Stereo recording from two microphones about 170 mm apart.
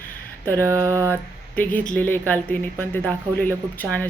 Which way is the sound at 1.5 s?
10° left (ahead or behind).